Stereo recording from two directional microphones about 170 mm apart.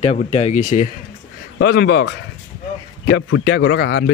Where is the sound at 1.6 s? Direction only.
90° left.